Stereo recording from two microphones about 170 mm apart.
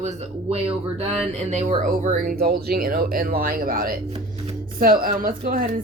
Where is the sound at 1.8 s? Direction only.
50° right (ahead or behind).